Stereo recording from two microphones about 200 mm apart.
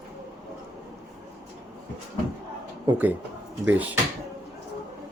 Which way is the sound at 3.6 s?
10° right (ahead or behind).